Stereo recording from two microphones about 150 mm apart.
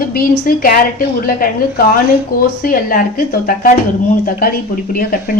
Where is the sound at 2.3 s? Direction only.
80° left.